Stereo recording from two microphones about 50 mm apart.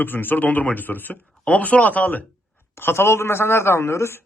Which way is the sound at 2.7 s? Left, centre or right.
Left.